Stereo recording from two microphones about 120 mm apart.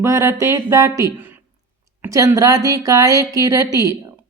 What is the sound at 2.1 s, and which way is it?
Speech, 30° right (ahead or behind).